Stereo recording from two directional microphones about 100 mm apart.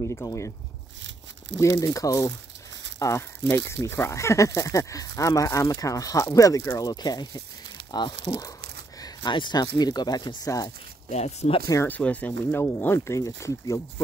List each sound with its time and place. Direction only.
0.1 s speech: 30° left (ahead or behind)
1.6 s speech: 30° left (ahead or behind)
11.1 s speech: 90° left
11.6 s speech: 35° left (ahead or behind)
11.9 s speech: 15° left (ahead or behind); by 14.0 s 30° left (ahead or behind)